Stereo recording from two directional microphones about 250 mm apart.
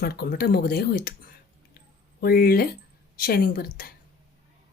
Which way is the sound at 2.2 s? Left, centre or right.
Left.